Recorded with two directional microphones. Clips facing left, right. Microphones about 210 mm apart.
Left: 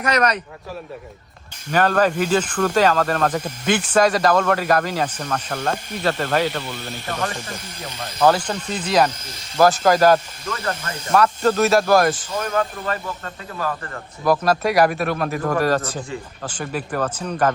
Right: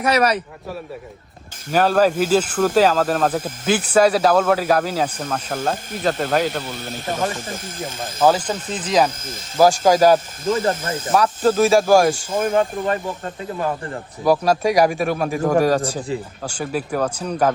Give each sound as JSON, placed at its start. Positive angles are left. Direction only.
{"t": 0.0, "sound": "speech", "side_deg": -5}
{"t": 1.7, "sound": "speech", "side_deg": -5}
{"t": 7.3, "sound": "speech", "side_deg": -50}
{"t": 8.2, "sound": "speech", "side_deg": -5}
{"t": 10.4, "sound": "speech", "side_deg": -25}
{"t": 11.1, "sound": "speech", "side_deg": -5}
{"t": 12.4, "sound": "speech", "side_deg": -20}
{"t": 14.3, "sound": "speech", "side_deg": -10}